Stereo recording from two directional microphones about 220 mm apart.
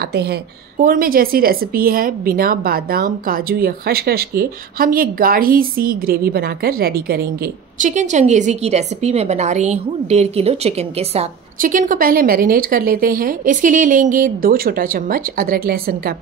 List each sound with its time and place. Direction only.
0.0 s a woman's voice: 45° right (ahead or behind)
7.8 s speech: 35° right (ahead or behind)